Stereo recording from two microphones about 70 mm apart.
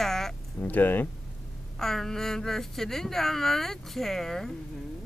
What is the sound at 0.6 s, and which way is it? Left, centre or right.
Speech, left.